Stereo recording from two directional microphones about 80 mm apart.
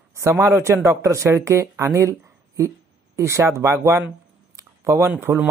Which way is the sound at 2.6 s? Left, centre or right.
Right.